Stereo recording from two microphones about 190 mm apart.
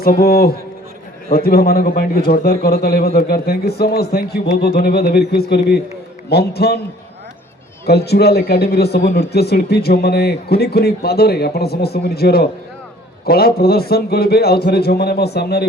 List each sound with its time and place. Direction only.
0.0 s a man's voice: 50° left (ahead or behind)
7.9 s a man's voice: 55° left (ahead or behind)